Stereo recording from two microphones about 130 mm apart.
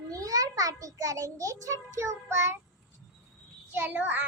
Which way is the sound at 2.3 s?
20° right (ahead or behind).